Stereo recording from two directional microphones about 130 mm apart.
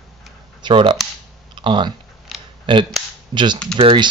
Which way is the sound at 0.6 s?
40° right (ahead or behind).